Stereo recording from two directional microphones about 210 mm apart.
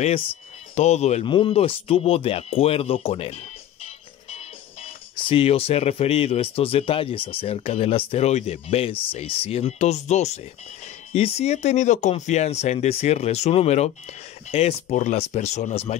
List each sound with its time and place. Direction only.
0.7 s speech: 30° left (ahead or behind)
5.3 s speech: 30° left (ahead or behind)